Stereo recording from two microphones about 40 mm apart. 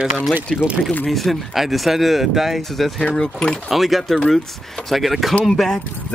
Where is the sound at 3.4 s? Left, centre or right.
Left.